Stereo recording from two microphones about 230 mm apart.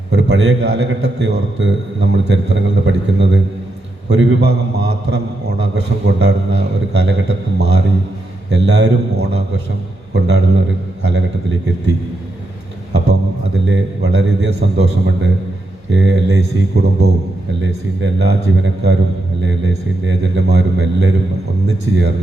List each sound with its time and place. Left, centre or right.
0.1 s a man's voice: right
12.9 s a man's voice: right